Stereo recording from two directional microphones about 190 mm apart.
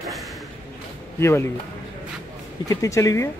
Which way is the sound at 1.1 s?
15° left (ahead or behind).